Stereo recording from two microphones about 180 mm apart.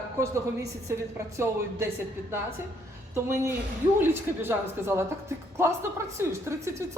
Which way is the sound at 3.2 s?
15° right (ahead or behind).